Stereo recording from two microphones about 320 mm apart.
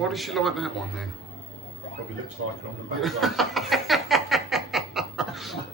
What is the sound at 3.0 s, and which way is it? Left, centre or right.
Chuckle, centre.